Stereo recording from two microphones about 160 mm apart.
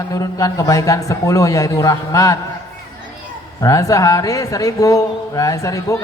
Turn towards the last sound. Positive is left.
turn(degrees=20)  # may be behind; listen again after turning